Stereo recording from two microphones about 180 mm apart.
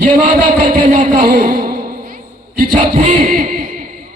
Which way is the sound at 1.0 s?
50° right (ahead or behind).